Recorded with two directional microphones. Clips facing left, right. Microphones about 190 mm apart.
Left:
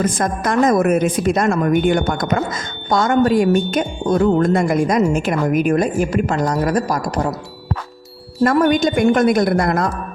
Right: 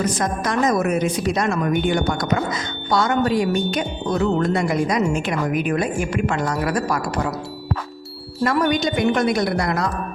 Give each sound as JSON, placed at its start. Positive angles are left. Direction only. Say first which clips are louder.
{"t": 0.0, "sound": "a woman's voice", "louder": "left 3 dB", "side_deg": 50}
{"t": 8.4, "sound": "a woman's voice", "louder": "left 5 dB", "side_deg": 50}